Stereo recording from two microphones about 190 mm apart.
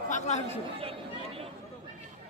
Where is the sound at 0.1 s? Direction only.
35° left (ahead or behind).